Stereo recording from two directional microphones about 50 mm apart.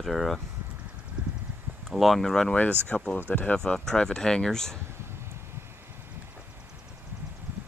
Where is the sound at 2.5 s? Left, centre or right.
Left.